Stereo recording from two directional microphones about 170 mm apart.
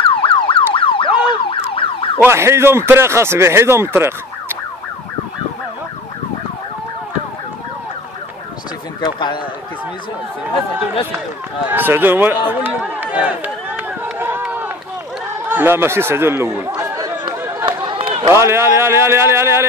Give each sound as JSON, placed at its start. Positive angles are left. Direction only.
{"t": 0.0, "sound": "car alarm", "side_deg": 30}
{"t": 0.7, "sound": "emergency vehicle", "side_deg": 30}
{"t": 2.2, "sound": "speech", "side_deg": -15}
{"t": 9.0, "sound": "speech", "side_deg": 25}
{"t": 11.7, "sound": "run", "side_deg": -10}
{"t": 15.4, "sound": "chatter", "side_deg": -10}
{"t": 18.3, "sound": "speech", "side_deg": -15}